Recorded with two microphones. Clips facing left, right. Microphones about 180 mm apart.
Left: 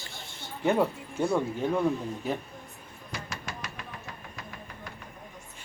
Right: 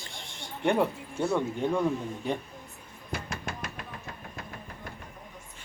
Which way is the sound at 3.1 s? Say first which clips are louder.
Right 3 dB; 55° right (ahead or behind).